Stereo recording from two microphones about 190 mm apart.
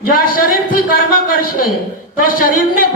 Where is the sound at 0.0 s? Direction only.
50° left (ahead or behind).